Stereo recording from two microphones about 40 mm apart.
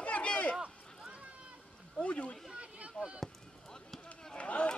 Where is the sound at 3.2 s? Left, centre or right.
Centre.